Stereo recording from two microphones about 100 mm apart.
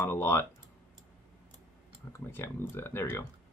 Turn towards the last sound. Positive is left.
turn(degrees=25)  # may be behind; listen again after turning